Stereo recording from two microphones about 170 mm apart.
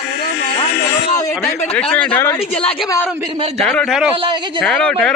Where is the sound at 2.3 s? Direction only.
35° left (ahead or behind).